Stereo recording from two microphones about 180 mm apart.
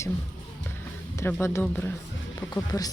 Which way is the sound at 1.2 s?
15° left (ahead or behind).